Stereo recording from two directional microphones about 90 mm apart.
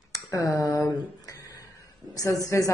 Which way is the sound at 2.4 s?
35° left (ahead or behind).